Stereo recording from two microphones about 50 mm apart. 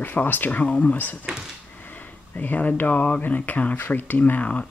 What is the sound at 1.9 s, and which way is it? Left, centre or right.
Speech, left.